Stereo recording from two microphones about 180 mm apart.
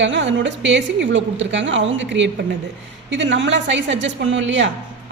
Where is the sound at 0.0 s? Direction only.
90° right.